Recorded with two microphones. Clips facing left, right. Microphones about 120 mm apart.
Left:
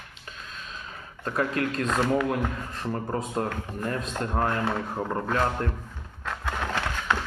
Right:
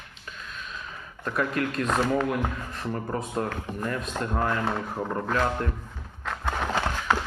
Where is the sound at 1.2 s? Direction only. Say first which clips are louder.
Even; 35° left (ahead or behind).